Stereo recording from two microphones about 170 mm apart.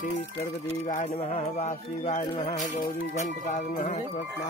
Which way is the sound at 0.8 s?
40° left (ahead or behind).